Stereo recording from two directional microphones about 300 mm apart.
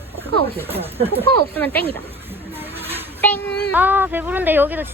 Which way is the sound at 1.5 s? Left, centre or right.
Centre.